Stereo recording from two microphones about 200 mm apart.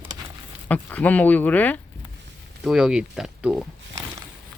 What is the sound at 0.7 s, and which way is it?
Speech, 10° left (ahead or behind).